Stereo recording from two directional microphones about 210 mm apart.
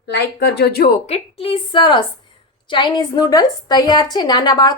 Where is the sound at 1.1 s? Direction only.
25° left (ahead or behind).